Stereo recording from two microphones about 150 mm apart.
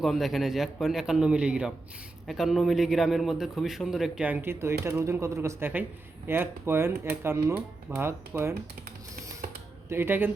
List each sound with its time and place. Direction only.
0.0 s a man's voice: centre (ahead or behind); by 8.5 s 15° right (ahead or behind)
9.9 s speech: 15° right (ahead or behind)